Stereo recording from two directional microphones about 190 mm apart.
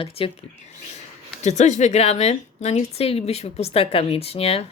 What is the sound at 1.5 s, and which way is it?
A woman's voice, 40° left (ahead or behind).